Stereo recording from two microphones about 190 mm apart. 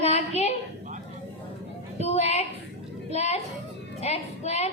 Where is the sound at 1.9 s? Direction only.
35° left (ahead or behind).